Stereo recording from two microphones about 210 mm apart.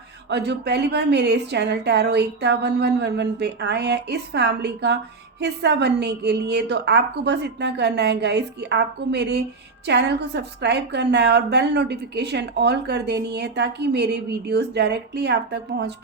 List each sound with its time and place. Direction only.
0.3 s a woman's voice: 55° right (ahead or behind)